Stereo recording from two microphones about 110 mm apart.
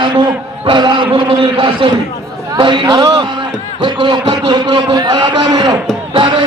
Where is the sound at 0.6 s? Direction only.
45° right (ahead or behind).